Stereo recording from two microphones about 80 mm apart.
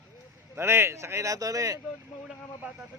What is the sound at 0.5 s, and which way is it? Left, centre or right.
Speech, right.